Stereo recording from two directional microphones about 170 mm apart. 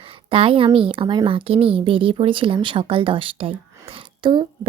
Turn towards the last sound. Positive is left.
turn(degrees=-30)  # may be behind; listen again after turning